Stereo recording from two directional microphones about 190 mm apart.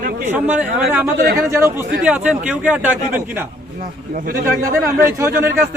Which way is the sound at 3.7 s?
45° right (ahead or behind).